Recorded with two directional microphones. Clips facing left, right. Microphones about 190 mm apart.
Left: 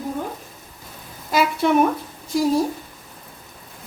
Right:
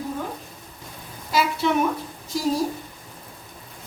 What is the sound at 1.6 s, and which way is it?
Speech, 55° left (ahead or behind).